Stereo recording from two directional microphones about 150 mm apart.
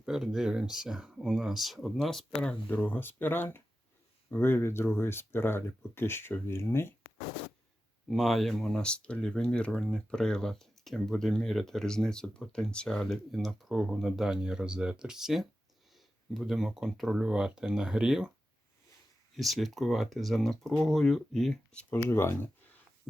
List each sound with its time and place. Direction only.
0.0 s speech: 5° right (ahead or behind); by 6.9 s 15° left (ahead or behind)
8.0 s speech: centre (ahead or behind)
19.4 s speech: centre (ahead or behind); by 22.4 s 15° left (ahead or behind)